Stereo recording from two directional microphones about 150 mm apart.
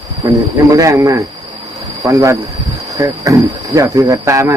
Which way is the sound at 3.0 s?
20° right (ahead or behind).